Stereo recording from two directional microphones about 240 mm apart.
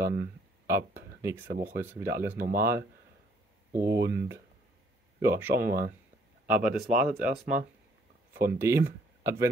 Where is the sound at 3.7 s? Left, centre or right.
Centre.